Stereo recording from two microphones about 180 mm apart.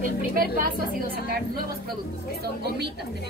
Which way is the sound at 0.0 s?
50° right (ahead or behind).